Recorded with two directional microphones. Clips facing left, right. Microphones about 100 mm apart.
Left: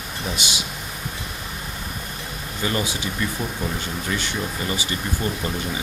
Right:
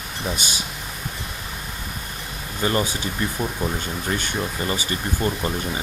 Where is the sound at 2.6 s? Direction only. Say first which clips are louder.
Right 3 dB; 35° right (ahead or behind).